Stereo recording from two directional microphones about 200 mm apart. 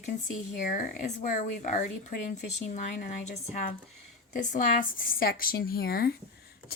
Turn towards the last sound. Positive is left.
turn(degrees=50)  # may be behind; listen again after turning